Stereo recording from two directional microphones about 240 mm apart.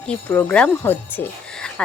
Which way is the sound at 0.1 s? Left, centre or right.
Centre.